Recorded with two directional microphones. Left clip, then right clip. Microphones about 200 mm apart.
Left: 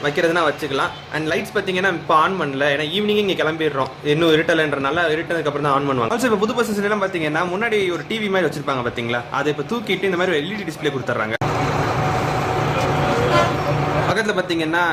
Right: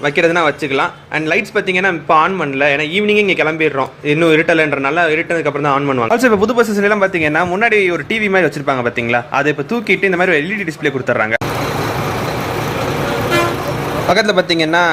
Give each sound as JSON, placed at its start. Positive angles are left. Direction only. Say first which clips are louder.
{"t": 0.0, "sound": "speech", "louder": "right 5 dB", "side_deg": -20}
{"t": 14.1, "sound": "speech", "louder": "right 7 dB", "side_deg": -35}